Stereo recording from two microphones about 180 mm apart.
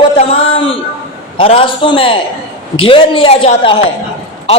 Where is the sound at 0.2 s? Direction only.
30° left (ahead or behind).